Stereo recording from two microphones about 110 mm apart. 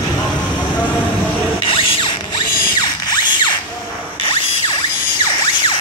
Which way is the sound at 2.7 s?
40° left (ahead or behind).